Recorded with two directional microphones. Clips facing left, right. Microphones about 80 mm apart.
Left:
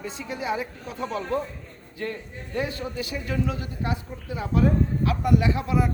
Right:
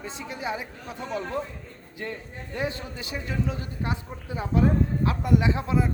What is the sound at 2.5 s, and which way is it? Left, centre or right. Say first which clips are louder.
Speech: left 3 dB; right.